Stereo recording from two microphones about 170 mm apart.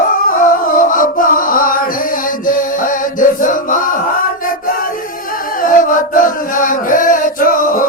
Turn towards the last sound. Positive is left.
turn(degrees=55)  # may be behind; listen again after turning